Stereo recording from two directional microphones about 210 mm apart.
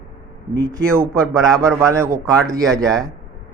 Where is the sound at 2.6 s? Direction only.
Centre (ahead or behind).